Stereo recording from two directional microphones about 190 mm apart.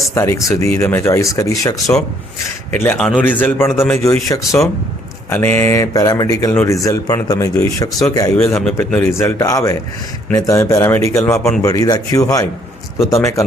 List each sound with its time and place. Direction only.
0.1 s speech: 15° left (ahead or behind)
8.4 s speech: 5° left (ahead or behind)
11.6 s speech: 20° left (ahead or behind)